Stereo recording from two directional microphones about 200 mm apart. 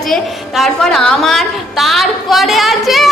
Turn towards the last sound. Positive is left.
turn(degrees=0)  # may be behind; listen again after turning